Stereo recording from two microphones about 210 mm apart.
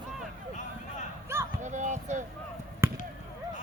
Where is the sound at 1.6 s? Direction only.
35° right (ahead or behind).